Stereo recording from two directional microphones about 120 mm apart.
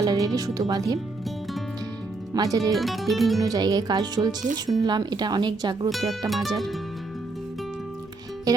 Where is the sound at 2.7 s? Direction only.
Centre (ahead or behind).